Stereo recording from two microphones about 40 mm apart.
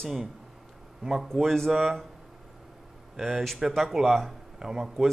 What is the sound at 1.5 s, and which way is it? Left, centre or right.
Speech, centre.